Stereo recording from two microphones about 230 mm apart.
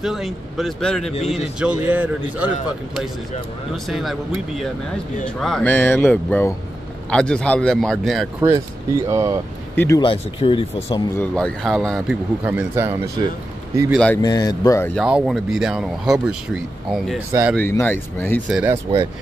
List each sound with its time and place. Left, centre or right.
0.0 s speech: centre
3.7 s speech: centre
8.4 s speech: centre
9.8 s speech: centre
11.1 s speech: centre
13.9 s speech: centre
14.2 s speech: centre
15.0 s speech: centre
17.6 s speech: centre
18.9 s speech: centre